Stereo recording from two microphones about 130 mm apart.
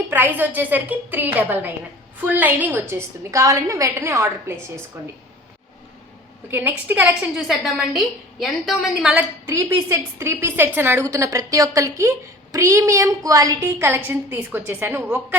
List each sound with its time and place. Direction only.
0.1 s a woman's voice: 15° right (ahead or behind)
6.5 s a woman's voice: 15° right (ahead or behind)
7.3 s a woman's voice: centre (ahead or behind)
9.5 s a woman's voice: 25° right (ahead or behind)